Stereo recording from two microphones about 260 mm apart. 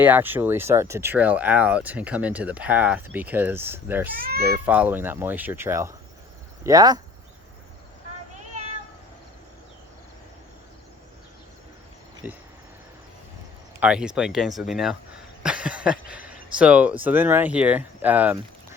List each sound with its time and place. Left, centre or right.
0.0 s speech: centre
4.2 s a child's voice: right
4.6 s speech: centre
12.2 s speech: centre
13.7 s speech: centre